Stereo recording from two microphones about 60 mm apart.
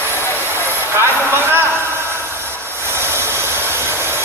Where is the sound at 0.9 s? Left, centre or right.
Right.